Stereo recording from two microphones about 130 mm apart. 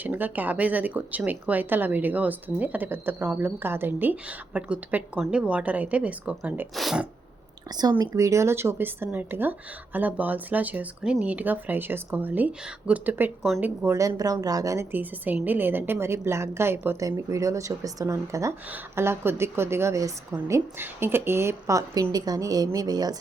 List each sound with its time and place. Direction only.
0.0 s speech: 15° right (ahead or behind)
7.7 s a woman's voice: 30° right (ahead or behind)
14.9 s a woman's voice: 15° right (ahead or behind); by 23.1 s 30° right (ahead or behind)